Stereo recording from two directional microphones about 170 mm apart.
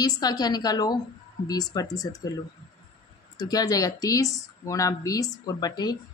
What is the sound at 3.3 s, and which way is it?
Speech, 20° left (ahead or behind).